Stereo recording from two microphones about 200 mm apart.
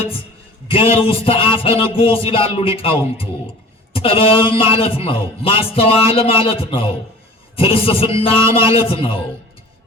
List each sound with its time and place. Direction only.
0.7 s a man's voice: 30° left (ahead or behind)